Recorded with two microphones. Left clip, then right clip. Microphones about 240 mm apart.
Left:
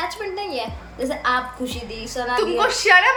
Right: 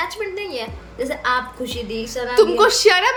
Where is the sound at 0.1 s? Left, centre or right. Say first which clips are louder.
Right 1 dB; centre.